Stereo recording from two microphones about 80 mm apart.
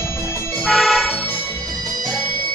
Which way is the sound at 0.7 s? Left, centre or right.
Centre.